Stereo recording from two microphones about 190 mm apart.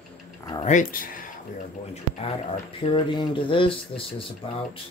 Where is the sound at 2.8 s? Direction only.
25° left (ahead or behind).